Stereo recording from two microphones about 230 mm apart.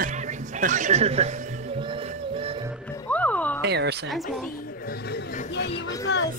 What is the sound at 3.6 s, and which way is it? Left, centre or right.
Speech, right.